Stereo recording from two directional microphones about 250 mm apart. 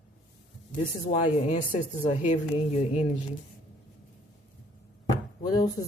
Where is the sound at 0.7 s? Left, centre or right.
Left.